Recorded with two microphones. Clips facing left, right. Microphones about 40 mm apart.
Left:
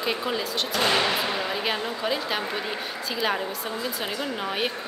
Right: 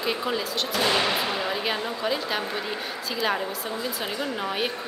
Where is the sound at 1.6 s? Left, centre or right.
Centre.